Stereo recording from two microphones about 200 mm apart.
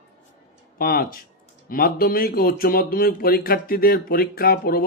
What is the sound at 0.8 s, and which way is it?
Speech, 45° left (ahead or behind).